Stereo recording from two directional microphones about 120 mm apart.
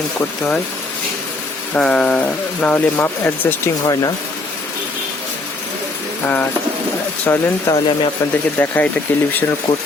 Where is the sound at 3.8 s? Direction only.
35° left (ahead or behind).